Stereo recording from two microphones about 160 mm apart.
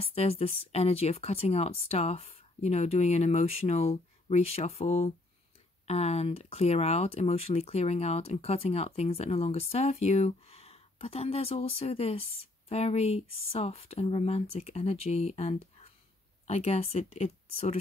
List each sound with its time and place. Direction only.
0.0 s speech: 40° left (ahead or behind)